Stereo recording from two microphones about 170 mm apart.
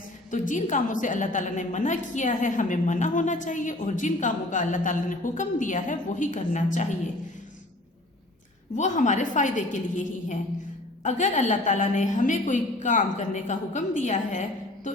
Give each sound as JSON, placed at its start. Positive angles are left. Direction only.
{"t": 0.3, "sound": "a woman's voice", "side_deg": 45}
{"t": 8.7, "sound": "a woman's voice", "side_deg": 45}